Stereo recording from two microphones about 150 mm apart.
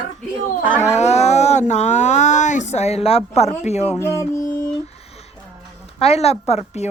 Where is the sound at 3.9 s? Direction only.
20° left (ahead or behind).